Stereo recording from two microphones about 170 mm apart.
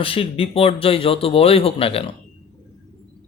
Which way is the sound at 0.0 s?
35° left (ahead or behind).